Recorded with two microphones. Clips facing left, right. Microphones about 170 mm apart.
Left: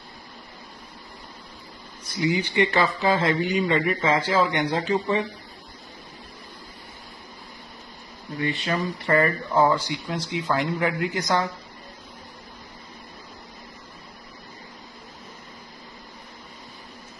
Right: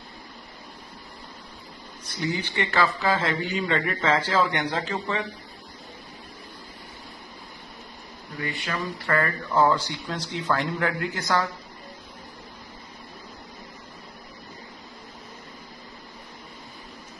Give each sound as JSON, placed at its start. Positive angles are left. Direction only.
{"t": 2.1, "sound": "speech", "side_deg": 10}
{"t": 8.4, "sound": "speech", "side_deg": 25}